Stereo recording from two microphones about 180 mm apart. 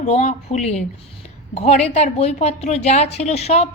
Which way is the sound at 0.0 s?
40° left (ahead or behind).